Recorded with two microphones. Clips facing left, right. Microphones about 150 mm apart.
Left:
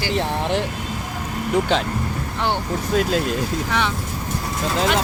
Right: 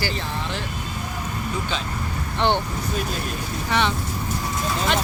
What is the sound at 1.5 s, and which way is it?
Speech, 70° left (ahead or behind).